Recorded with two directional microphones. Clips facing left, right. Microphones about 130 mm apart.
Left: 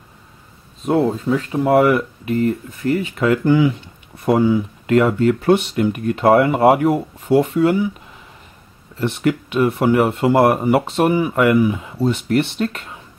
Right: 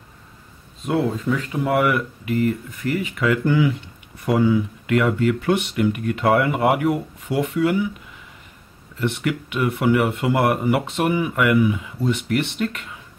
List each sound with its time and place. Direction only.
0.8 s speech: 35° left (ahead or behind)
9.0 s speech: 30° left (ahead or behind)